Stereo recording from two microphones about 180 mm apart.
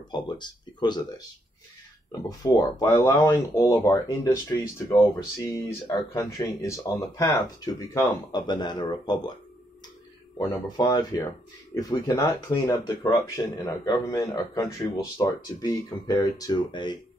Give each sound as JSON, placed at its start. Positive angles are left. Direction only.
{"t": 0.1, "sound": "speech", "side_deg": 25}
{"t": 2.2, "sound": "speech", "side_deg": 20}
{"t": 10.4, "sound": "speech", "side_deg": 20}